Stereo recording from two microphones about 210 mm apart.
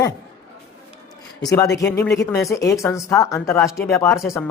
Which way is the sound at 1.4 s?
15° left (ahead or behind).